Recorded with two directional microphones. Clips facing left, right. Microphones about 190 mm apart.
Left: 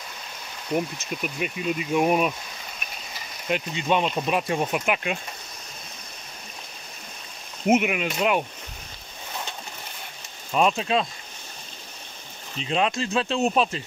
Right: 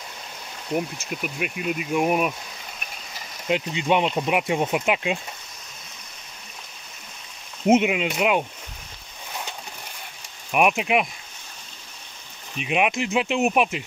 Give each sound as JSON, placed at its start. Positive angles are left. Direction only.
{"t": 0.7, "sound": "speech", "side_deg": -5}
{"t": 3.4, "sound": "speech", "side_deg": -20}
{"t": 7.6, "sound": "speech", "side_deg": -25}
{"t": 10.5, "sound": "speech", "side_deg": -15}
{"t": 12.5, "sound": "speech", "side_deg": -15}